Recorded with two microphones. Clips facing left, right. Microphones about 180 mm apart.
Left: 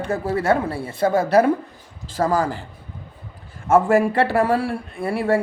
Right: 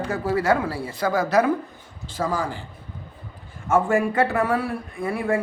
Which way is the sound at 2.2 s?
45° left (ahead or behind).